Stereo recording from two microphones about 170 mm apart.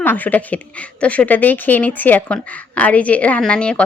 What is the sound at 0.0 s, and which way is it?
A woman's voice, 10° left (ahead or behind).